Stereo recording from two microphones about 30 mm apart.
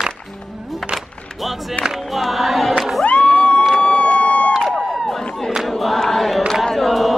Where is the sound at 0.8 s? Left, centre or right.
Centre.